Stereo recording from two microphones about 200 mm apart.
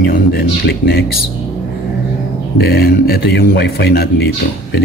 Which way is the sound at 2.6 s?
55° left (ahead or behind).